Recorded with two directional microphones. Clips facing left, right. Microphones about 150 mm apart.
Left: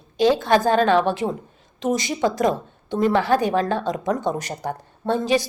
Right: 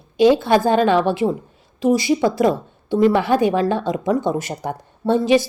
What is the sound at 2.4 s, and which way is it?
A woman's voice, 10° right (ahead or behind).